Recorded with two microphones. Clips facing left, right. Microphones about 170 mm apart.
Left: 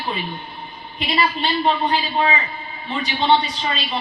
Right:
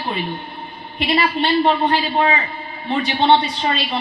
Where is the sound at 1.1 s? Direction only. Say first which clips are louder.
Right 4 dB; 60° right (ahead or behind).